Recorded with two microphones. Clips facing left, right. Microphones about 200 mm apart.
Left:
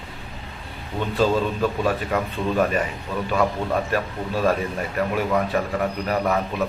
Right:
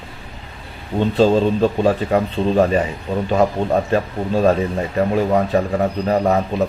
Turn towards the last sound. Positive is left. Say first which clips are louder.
# right 5 dB
turn(degrees=-35)  # may be behind; listen again after turning